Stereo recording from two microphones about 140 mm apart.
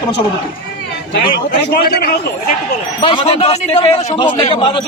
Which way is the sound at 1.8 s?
90° left.